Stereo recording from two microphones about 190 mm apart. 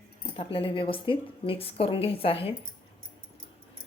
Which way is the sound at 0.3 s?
30° left (ahead or behind).